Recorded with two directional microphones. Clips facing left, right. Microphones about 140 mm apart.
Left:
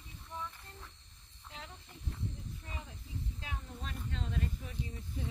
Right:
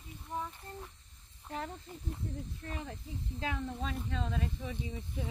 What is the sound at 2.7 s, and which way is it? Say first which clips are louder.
Speech: right 8 dB; 75° right (ahead or behind).